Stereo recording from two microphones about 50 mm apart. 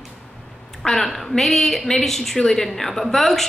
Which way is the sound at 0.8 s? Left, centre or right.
Centre.